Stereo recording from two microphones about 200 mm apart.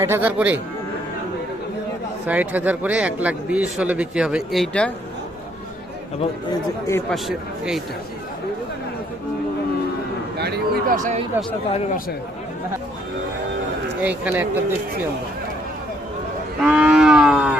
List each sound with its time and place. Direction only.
0.0 s speech: 10° right (ahead or behind)
2.2 s speech: 5° right (ahead or behind)
6.5 s speech: 15° left (ahead or behind)
7.1 s speech: centre (ahead or behind)
10.3 s a sound: 55° right (ahead or behind); by 11.3 s 35° right (ahead or behind)
14.0 s speech: 10° right (ahead or behind)
16.6 s livestock: 5° right (ahead or behind)